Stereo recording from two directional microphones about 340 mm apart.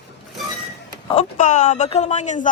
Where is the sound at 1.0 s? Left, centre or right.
Centre.